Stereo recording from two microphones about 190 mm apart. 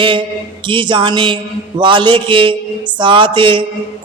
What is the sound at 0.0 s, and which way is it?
Speech, 25° right (ahead or behind).